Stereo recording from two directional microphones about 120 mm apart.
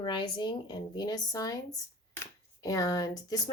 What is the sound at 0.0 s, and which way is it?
Speech, 40° left (ahead or behind).